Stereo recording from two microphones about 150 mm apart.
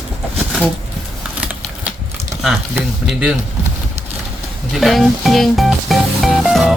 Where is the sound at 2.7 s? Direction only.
5° right (ahead or behind).